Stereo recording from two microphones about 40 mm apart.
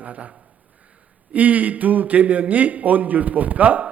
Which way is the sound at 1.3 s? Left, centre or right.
Right.